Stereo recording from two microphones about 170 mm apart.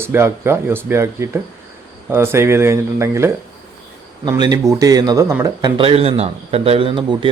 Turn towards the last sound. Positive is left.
turn(degrees=-30)  # may be behind; listen again after turning